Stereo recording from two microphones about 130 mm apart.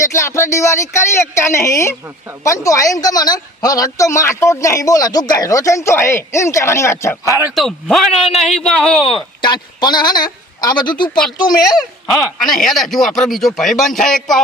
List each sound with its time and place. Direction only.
0.0 s a woman's voice: 20° left (ahead or behind)
7.3 s speech: 20° right (ahead or behind)
7.5 s a man's voice: centre (ahead or behind)
9.4 s a man's voice: 35° left (ahead or behind)
12.4 s a man's voice: 5° left (ahead or behind)